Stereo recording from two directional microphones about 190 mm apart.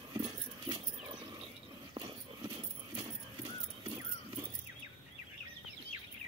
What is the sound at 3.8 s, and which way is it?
Keys jangling, 30° right (ahead or behind).